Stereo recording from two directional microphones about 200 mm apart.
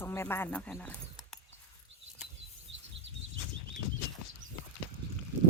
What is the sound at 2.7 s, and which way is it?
Insect, 65° right (ahead or behind).